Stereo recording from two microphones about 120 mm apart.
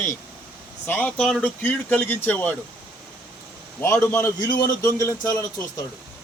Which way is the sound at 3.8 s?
20° left (ahead or behind).